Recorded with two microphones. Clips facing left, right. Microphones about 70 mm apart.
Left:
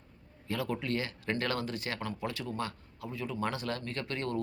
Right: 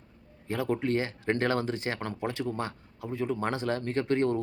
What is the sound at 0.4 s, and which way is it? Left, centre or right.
Speech, right.